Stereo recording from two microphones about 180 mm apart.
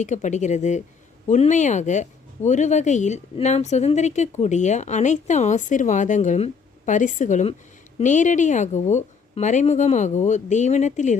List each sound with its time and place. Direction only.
0.0 s speech: 40° left (ahead or behind)